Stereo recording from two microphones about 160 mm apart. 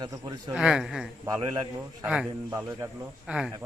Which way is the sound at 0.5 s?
5° right (ahead or behind).